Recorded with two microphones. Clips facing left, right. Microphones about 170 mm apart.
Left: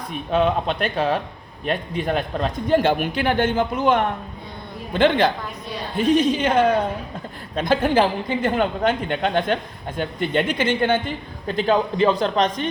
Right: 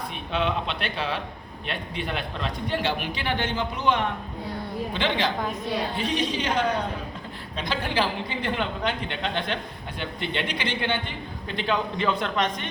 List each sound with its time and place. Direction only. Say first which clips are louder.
0.1 s a man's voice: left 8 dB; 45° left (ahead or behind)